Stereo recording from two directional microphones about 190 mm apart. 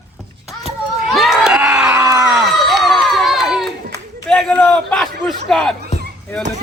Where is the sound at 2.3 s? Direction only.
Centre (ahead or behind).